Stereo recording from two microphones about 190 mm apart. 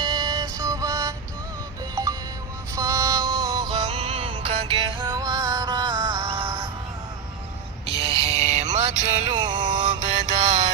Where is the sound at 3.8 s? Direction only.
35° right (ahead or behind); by 6.5 s 10° right (ahead or behind).